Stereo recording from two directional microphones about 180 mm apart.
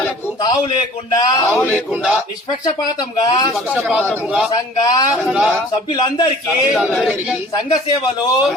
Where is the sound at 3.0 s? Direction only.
25° left (ahead or behind).